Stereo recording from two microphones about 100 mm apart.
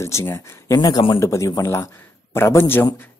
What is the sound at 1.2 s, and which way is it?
Speech, 30° left (ahead or behind).